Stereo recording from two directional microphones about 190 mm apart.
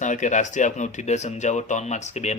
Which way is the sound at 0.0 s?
40° left (ahead or behind).